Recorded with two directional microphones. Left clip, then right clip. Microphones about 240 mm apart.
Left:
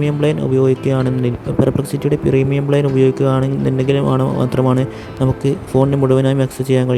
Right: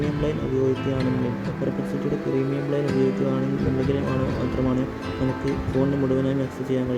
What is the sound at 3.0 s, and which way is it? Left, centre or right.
Speech, left.